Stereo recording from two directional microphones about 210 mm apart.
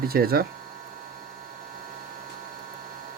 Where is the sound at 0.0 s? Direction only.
45° right (ahead or behind).